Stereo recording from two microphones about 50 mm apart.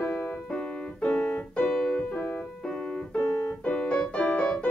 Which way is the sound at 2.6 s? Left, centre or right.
Centre.